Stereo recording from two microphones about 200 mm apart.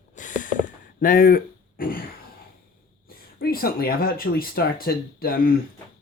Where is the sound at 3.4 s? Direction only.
45° left (ahead or behind).